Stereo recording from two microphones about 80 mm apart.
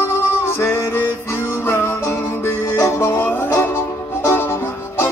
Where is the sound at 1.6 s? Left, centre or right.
Left.